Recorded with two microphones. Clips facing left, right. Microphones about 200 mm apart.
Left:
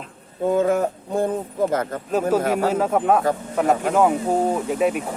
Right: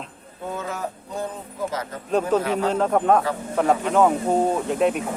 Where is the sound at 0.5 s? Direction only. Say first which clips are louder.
Left 11 dB; 50° left (ahead or behind).